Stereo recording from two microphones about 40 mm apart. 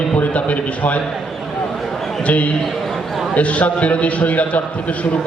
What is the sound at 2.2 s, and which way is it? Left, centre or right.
A man's voice, left.